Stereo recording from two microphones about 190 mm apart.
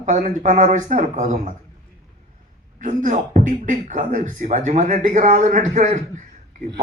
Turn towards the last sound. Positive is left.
turn(degrees=-40)  # may be behind; listen again after turning